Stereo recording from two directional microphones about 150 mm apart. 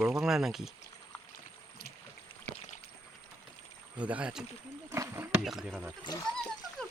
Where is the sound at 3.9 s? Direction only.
10° right (ahead or behind).